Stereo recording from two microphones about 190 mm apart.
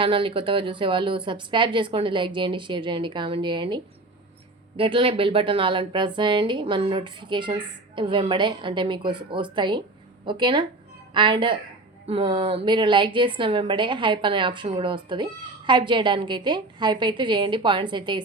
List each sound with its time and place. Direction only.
0.0 s a woman's voice: 25° right (ahead or behind)
4.8 s a woman's voice: 30° right (ahead or behind)